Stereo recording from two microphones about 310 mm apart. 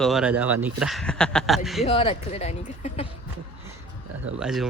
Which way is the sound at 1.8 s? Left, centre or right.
Centre.